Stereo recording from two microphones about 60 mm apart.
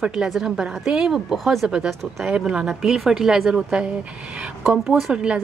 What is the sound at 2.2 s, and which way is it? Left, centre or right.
A woman's voice, centre.